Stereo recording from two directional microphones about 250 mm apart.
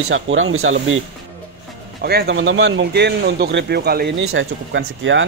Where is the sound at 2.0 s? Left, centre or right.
Right.